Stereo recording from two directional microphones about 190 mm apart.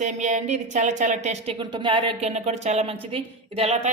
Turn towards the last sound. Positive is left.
turn(degrees=-30)  # may be behind; listen again after turning